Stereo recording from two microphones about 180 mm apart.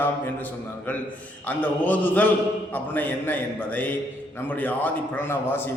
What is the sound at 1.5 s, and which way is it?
A man's voice, 10° left (ahead or behind).